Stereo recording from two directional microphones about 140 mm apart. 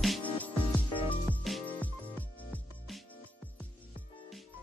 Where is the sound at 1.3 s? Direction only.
10° left (ahead or behind).